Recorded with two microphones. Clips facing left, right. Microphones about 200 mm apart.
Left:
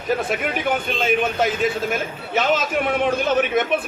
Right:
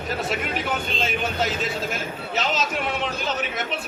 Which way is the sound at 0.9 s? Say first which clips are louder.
Left 6 dB; 50° left (ahead or behind).